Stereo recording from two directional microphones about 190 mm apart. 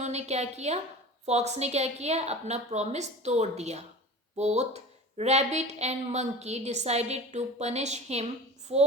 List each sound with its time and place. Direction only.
0.0 s speech: 35° right (ahead or behind)